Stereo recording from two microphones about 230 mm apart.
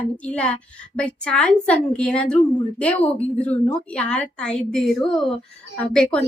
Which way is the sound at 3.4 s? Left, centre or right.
Centre.